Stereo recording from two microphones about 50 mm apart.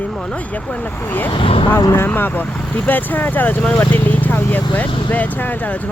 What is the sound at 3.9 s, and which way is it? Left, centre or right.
Vehicle, left.